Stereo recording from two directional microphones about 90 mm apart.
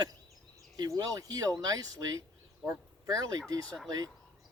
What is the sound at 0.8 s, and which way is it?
A man's voice, 45° right (ahead or behind).